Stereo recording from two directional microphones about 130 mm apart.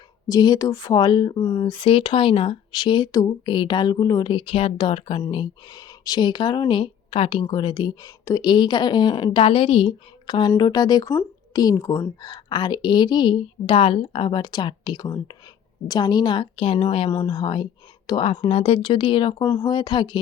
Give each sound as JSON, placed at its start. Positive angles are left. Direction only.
{"t": 0.3, "sound": "speech", "side_deg": 30}
{"t": 4.3, "sound": "speech", "side_deg": 45}
{"t": 17.1, "sound": "speech", "side_deg": 30}
{"t": 18.4, "sound": "speech", "side_deg": 50}